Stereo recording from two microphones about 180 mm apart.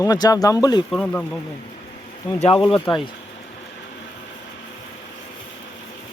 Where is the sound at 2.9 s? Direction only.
25° left (ahead or behind).